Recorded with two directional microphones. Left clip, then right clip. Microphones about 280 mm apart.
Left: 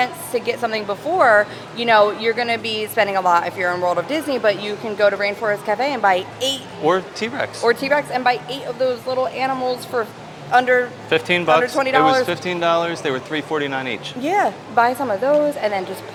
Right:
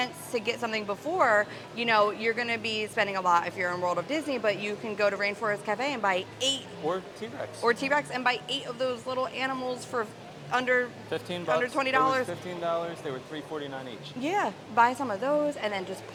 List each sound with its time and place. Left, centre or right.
0.0 s a woman's voice: right
6.8 s speech: left
7.6 s a woman's voice: centre
11.1 s speech: left
11.6 s a woman's voice: centre
12.3 s speech: left
14.2 s a woman's voice: centre